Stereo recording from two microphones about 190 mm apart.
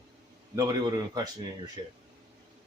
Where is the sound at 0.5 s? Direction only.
20° right (ahead or behind).